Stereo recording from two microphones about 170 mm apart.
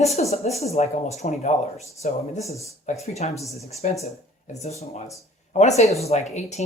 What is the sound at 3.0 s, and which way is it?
Speech, 40° left (ahead or behind).